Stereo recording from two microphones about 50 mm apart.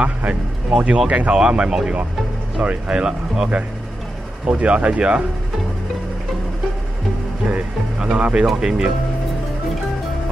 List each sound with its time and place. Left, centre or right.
0.0 s speech: right
4.5 s speech: right
7.4 s music: right
8.5 s speech: centre